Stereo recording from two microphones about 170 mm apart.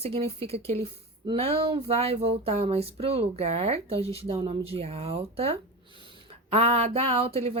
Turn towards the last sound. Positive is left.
turn(degrees=-35)  # may be behind; listen again after turning